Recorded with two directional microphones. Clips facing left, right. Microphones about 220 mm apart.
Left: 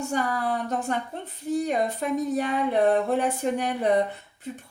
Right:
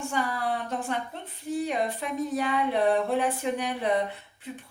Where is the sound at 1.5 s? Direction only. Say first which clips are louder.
Left 3 dB; 45° left (ahead or behind).